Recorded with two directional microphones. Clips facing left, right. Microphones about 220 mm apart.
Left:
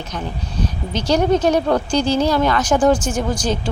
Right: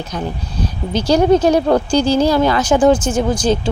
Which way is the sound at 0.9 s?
30° right (ahead or behind).